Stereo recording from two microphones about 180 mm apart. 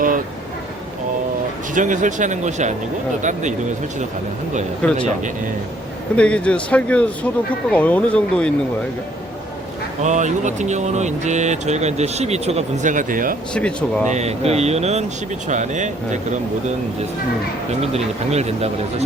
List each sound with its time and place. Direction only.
1.7 s speech: 45° right (ahead or behind)
4.8 s speech: 5° left (ahead or behind)
6.1 s speech: 5° left (ahead or behind)
10.0 s speech: 40° right (ahead or behind)
13.5 s speech: 5° left (ahead or behind)
14.1 s speech: 35° right (ahead or behind)
17.9 s speech: 35° right (ahead or behind)